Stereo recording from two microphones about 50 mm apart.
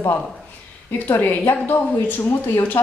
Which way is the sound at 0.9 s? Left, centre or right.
Left.